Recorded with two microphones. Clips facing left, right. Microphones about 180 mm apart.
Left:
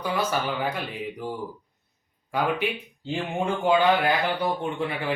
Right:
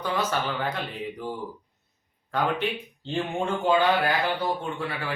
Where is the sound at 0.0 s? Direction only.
10° left (ahead or behind).